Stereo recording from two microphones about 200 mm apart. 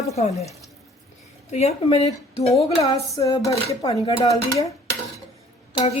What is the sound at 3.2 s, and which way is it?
Speech, 15° left (ahead or behind).